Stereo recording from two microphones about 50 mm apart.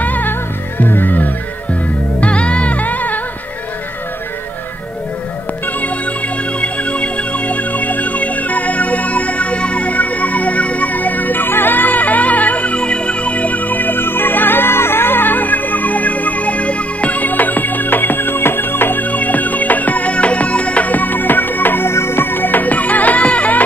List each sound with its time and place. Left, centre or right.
0.0 s music: left
5.8 s music: left